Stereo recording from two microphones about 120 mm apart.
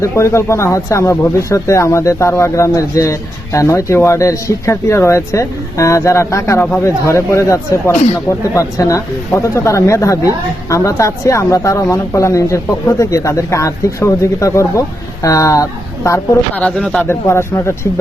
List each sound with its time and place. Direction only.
0.0 s speech: 25° left (ahead or behind)
16.6 s speech: 5° left (ahead or behind)
17.1 s speech: 20° left (ahead or behind)